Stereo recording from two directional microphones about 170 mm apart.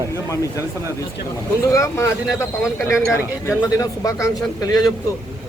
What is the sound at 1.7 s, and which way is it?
A man's voice, 20° left (ahead or behind).